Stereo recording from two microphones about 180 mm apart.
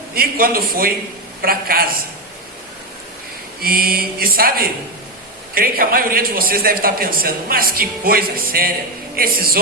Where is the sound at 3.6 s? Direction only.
55° right (ahead or behind).